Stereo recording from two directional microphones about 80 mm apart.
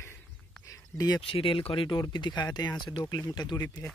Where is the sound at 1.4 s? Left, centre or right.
Left.